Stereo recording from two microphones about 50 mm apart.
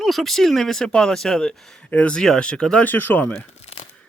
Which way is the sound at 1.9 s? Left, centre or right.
Left.